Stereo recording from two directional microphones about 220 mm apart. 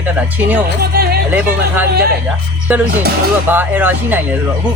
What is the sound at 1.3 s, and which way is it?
Speech, 10° right (ahead or behind).